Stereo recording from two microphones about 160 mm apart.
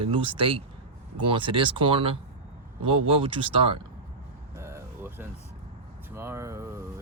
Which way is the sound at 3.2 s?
35° right (ahead or behind).